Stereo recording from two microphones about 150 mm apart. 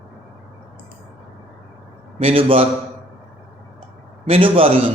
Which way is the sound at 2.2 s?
35° right (ahead or behind).